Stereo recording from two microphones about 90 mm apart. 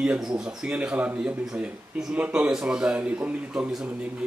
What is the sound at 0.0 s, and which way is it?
A man's voice, 10° right (ahead or behind).